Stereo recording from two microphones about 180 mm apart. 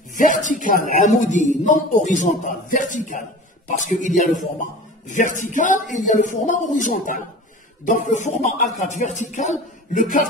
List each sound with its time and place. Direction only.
0.1 s a man's voice: 45° left (ahead or behind)